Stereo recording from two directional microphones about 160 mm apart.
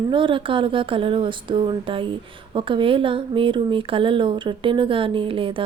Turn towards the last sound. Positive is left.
turn(degrees=-35)  # may be behind; listen again after turning